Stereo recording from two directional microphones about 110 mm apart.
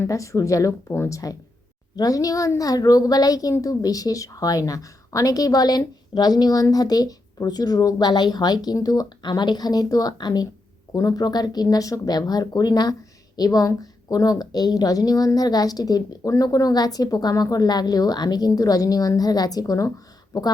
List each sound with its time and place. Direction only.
0.0 s speech: 30° left (ahead or behind)